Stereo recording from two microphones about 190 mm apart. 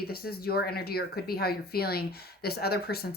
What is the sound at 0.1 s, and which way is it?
Speech, 55° left (ahead or behind).